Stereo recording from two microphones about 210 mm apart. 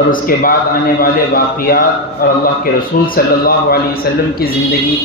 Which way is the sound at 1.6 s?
45° left (ahead or behind).